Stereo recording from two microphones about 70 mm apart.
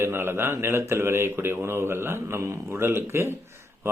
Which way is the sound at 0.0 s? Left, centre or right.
Right.